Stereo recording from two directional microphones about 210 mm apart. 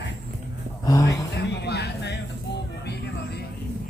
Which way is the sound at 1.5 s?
50° left (ahead or behind).